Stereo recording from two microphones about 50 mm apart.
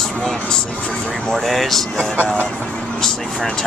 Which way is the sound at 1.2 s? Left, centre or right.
Centre.